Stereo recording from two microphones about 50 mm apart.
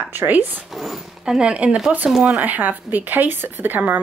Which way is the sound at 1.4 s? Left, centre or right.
Right.